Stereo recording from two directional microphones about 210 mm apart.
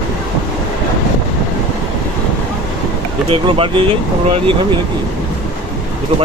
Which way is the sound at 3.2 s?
25° right (ahead or behind).